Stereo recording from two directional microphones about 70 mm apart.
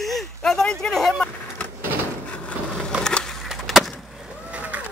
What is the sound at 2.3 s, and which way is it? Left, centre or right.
Wood, centre.